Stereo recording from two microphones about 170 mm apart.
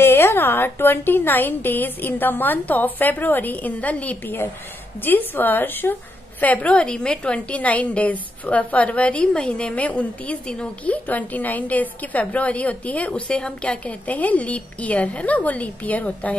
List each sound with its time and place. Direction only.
0.0 s a woman's voice: 15° left (ahead or behind)